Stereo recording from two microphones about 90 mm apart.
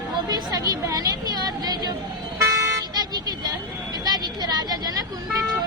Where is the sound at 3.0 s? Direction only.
50° right (ahead or behind).